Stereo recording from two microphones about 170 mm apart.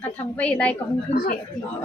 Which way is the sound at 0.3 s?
10° left (ahead or behind).